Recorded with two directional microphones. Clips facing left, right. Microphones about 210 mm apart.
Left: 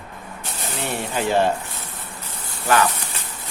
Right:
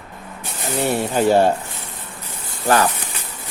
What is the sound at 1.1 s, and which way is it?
Speech, 40° right (ahead or behind).